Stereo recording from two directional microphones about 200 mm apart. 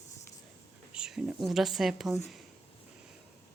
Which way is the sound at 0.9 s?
5° right (ahead or behind).